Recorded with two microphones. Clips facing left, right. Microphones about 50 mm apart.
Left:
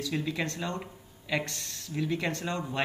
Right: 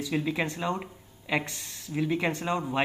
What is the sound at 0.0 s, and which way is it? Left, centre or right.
Speech, centre.